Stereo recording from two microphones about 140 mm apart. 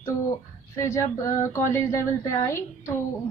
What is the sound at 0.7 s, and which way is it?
A woman's voice, 20° left (ahead or behind).